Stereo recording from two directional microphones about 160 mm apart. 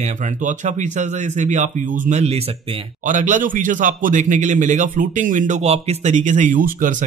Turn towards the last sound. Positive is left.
turn(degrees=-55)  # may be behind; listen again after turning